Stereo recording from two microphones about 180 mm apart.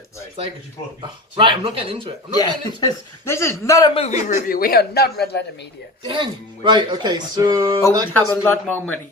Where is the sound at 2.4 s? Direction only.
20° left (ahead or behind).